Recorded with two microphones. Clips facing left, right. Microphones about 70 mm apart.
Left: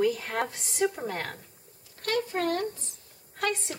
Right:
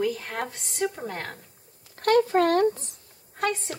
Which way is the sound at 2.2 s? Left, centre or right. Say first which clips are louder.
Right 8 dB; right.